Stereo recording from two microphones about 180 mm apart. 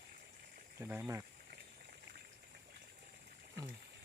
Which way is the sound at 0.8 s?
10° right (ahead or behind).